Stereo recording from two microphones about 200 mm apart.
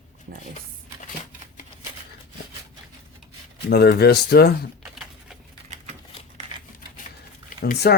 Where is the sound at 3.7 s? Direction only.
55° left (ahead or behind).